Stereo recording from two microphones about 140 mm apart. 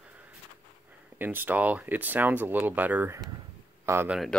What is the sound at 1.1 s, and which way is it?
Speech, 15° right (ahead or behind).